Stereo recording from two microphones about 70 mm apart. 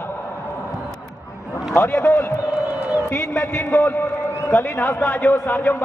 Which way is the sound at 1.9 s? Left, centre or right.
Left.